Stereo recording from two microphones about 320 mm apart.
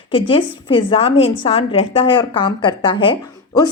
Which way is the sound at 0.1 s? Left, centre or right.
Centre.